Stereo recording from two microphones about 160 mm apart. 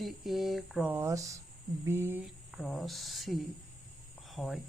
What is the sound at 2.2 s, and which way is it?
Speech, centre (ahead or behind).